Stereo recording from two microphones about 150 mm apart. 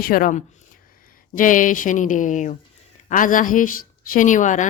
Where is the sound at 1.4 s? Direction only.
60° left (ahead or behind).